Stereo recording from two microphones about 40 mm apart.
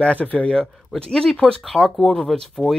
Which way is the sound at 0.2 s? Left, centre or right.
Left.